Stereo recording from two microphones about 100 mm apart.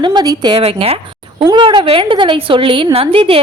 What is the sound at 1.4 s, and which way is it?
A woman's voice, 50° right (ahead or behind).